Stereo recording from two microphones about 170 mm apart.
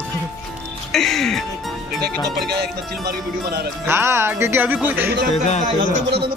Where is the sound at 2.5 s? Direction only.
75° right (ahead or behind).